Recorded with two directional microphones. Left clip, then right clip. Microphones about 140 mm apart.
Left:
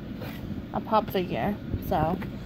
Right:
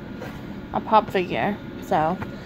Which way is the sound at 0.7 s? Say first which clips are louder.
Right 6 dB; centre (ahead or behind).